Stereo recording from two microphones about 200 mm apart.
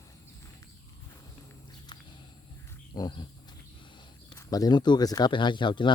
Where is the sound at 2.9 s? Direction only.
20° left (ahead or behind).